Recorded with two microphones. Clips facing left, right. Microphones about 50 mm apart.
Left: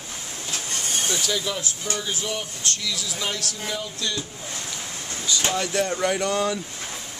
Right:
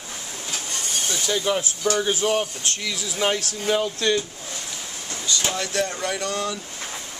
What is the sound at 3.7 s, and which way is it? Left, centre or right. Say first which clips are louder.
Speech: right 10 dB; right.